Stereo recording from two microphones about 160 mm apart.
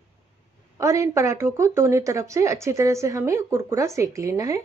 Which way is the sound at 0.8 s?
20° right (ahead or behind).